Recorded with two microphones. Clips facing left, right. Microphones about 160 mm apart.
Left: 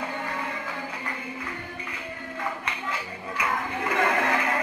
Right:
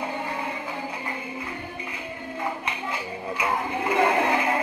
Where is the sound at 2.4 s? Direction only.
20° right (ahead or behind).